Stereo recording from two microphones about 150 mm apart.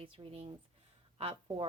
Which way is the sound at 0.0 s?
35° right (ahead or behind).